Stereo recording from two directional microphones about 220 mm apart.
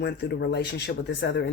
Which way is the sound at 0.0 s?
50° left (ahead or behind).